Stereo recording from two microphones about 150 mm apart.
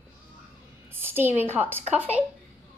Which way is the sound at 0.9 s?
15° right (ahead or behind).